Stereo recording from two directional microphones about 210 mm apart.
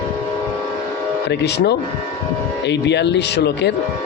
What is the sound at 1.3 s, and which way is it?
Speech, 50° left (ahead or behind).